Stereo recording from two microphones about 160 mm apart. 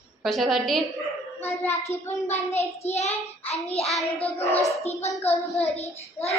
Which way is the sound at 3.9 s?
Centre (ahead or behind).